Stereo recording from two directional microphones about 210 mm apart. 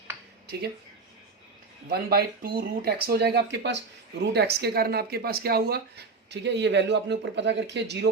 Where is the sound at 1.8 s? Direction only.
45° right (ahead or behind).